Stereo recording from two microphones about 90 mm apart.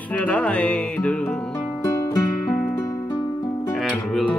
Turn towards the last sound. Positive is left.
turn(degrees=5)  # may be behind; listen again after turning